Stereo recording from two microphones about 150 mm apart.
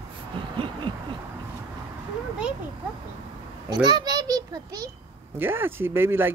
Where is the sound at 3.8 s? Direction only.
30° right (ahead or behind).